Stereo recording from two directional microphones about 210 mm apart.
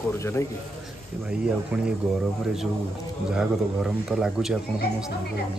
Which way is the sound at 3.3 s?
5° right (ahead or behind).